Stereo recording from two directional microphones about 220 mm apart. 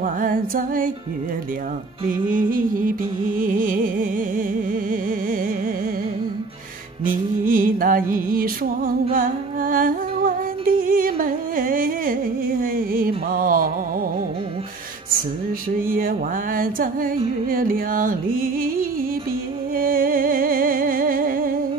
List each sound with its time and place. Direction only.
0.0 s music: 40° right (ahead or behind)
2.0 s music: 40° right (ahead or behind)
7.1 s music: 40° right (ahead or behind)
15.9 s music: 40° right (ahead or behind)